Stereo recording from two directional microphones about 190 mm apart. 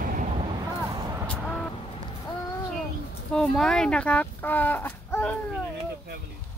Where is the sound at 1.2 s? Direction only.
5° left (ahead or behind).